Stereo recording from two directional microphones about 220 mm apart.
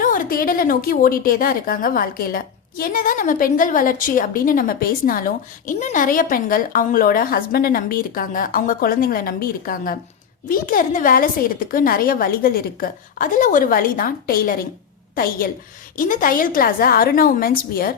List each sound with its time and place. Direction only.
0.0 s a woman's voice: 40° left (ahead or behind)